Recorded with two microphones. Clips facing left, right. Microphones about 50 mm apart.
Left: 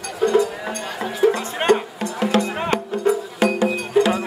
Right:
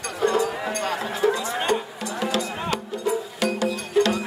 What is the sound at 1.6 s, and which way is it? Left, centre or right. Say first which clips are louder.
Music: left 6 dB; left.